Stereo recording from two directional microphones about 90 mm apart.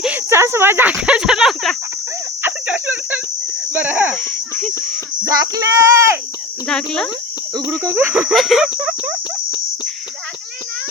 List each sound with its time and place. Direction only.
0.3 s cricket: 30° right (ahead or behind); by 1.7 s 5° right (ahead or behind)
2.4 s a sound: 20° right (ahead or behind)
5.2 s speech: 40° right (ahead or behind)
6.7 s insect: 10° left (ahead or behind)
7.9 s speech: 25° right (ahead or behind)
8.3 s a sound: centre (ahead or behind)